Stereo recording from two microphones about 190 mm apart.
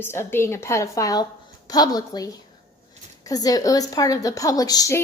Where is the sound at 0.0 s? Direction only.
10° left (ahead or behind).